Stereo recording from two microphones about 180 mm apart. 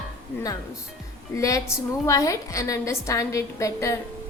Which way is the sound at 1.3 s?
20° left (ahead or behind).